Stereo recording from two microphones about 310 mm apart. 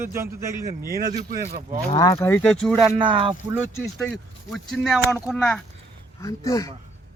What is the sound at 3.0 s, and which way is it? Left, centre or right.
Speech, centre.